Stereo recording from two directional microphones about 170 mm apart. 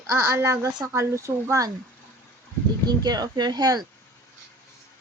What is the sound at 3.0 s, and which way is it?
Speech, 25° right (ahead or behind).